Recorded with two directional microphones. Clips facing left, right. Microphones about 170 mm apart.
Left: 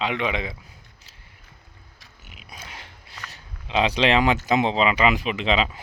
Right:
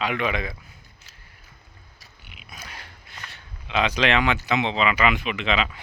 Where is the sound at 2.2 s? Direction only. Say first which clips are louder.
Left 1 dB; 40° left (ahead or behind).